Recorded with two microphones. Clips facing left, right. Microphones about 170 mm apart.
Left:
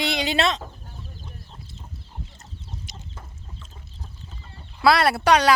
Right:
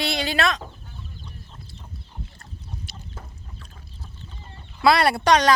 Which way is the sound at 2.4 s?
20° left (ahead or behind).